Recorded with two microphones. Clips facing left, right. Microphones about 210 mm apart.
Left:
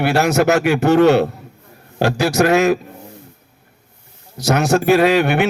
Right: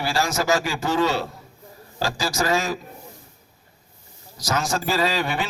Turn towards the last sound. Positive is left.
turn(degrees=65)  # may be behind; listen again after turning